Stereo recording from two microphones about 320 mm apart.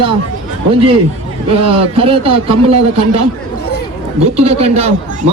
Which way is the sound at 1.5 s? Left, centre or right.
Centre.